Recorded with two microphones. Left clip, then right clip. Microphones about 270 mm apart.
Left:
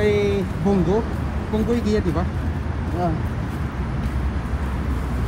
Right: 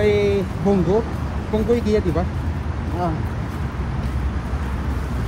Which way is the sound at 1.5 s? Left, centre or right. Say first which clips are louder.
Right 3 dB; left.